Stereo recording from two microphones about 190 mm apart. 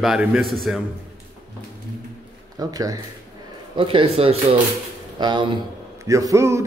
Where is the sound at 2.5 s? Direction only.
20° right (ahead or behind).